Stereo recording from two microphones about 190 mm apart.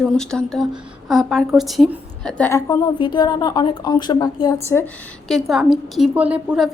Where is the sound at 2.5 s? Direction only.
15° left (ahead or behind).